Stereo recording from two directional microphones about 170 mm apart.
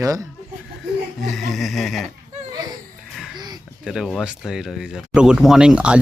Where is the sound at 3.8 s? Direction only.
5° right (ahead or behind).